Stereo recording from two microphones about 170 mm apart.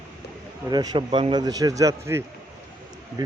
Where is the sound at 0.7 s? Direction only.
25° right (ahead or behind).